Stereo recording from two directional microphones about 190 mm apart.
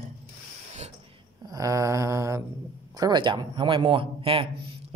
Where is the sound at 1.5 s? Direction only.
15° right (ahead or behind).